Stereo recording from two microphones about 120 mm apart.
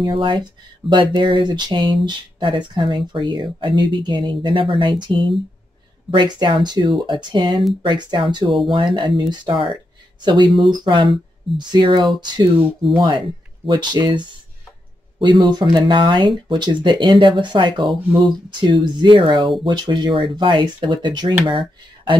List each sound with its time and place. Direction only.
0.0 s speech: 45° right (ahead or behind)